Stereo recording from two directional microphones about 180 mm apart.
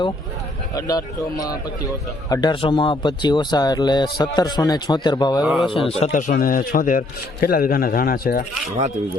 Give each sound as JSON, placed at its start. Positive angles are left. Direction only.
{"t": 0.7, "sound": "speech", "side_deg": 20}
{"t": 5.5, "sound": "speech", "side_deg": -5}
{"t": 5.7, "sound": "a man's voice", "side_deg": 35}